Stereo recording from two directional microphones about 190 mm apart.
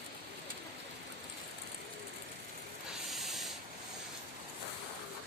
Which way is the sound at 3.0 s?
Centre (ahead or behind).